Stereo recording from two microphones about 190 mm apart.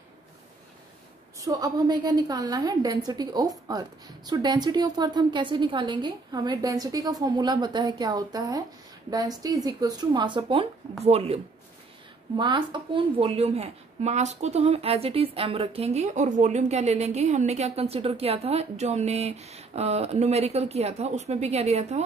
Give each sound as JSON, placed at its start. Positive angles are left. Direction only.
{"t": 1.4, "sound": "a woman's voice", "side_deg": -20}